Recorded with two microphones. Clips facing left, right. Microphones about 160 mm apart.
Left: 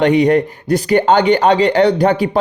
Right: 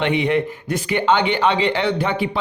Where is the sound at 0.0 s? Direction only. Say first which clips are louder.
Left 7 dB; 40° left (ahead or behind).